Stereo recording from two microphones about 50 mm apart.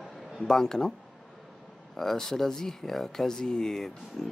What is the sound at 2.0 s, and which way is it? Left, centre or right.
Speech, centre.